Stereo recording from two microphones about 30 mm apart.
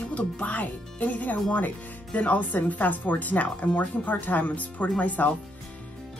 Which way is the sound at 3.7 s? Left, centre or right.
Left.